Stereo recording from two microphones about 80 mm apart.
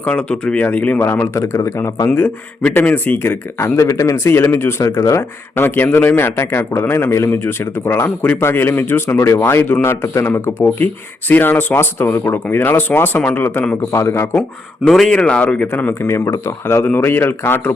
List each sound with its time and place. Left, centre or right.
0.0 s speech: centre; by 1.9 s left
2.1 s speech: left
3.6 s a man's voice: left
4.8 s a man's voice: left
14.8 s a man's voice: centre; by 16.0 s left
16.0 s a man's voice: left
16.8 s speech: left